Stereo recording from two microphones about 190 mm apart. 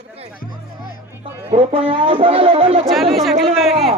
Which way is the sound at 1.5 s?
30° right (ahead or behind).